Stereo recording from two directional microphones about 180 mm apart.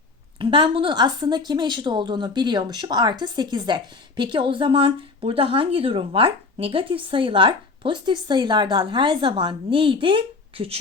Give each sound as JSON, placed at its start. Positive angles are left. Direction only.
{"t": 0.3, "sound": "speech", "side_deg": -25}